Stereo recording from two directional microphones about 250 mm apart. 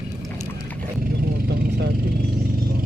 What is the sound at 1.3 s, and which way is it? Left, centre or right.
Vehicle, right.